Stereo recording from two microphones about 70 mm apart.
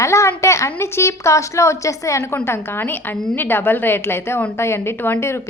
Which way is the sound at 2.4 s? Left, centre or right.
Left.